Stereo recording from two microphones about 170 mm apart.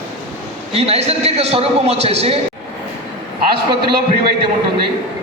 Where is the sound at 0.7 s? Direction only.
35° right (ahead or behind).